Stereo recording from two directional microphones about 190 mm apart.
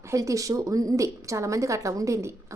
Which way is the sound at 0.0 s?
15° right (ahead or behind).